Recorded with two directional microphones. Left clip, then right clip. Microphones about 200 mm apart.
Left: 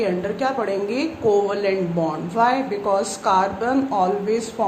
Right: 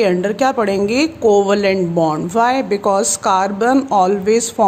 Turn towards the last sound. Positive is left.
turn(degrees=-50)  # may be behind; listen again after turning